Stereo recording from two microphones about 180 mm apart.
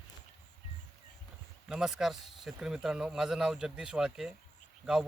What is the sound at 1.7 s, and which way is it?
Speech, 5° right (ahead or behind).